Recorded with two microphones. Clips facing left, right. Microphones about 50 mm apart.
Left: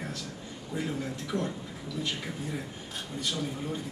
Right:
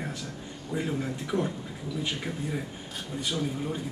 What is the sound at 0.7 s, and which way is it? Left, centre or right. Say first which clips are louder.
Speech: right 3 dB; centre.